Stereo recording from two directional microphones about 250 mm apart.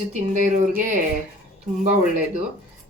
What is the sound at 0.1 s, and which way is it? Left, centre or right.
Speech, right.